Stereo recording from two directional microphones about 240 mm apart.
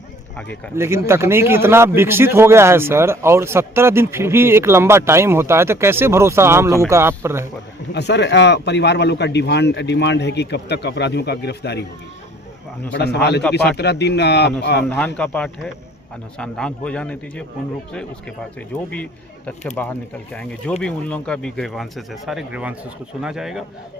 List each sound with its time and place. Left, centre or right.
0.8 s speech: centre
7.9 s speech: left
12.9 s speech: left
14.8 s speech: centre
19.5 s speech: centre